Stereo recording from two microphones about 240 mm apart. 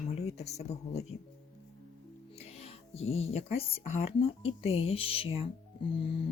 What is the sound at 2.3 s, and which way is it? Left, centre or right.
Speech, left.